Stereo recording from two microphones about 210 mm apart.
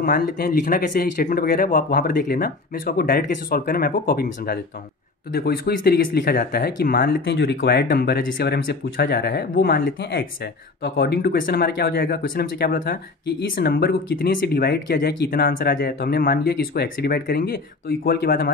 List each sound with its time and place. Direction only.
0.0 s speech: 40° left (ahead or behind)